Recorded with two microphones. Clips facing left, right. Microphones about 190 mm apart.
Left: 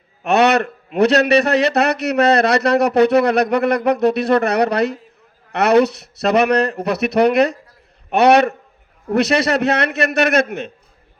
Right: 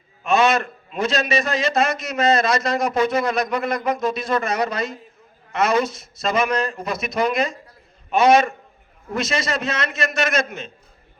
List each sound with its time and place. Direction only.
0.2 s a man's voice: 65° left (ahead or behind)